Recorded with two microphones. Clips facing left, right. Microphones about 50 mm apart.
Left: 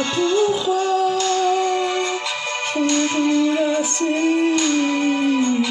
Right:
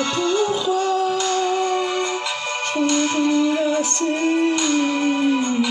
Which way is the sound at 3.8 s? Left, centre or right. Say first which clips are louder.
Left 1 dB; centre.